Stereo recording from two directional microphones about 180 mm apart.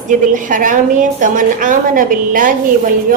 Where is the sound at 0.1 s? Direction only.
45° right (ahead or behind).